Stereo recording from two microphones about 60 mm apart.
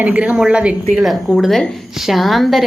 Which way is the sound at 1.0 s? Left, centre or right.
Centre.